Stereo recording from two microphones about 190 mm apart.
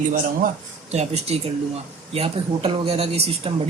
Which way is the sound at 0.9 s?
35° right (ahead or behind).